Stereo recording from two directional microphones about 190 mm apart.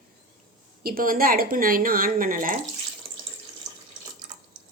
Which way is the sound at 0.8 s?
50° right (ahead or behind).